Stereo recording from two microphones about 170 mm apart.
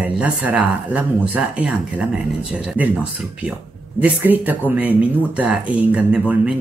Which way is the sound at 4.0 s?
10° right (ahead or behind).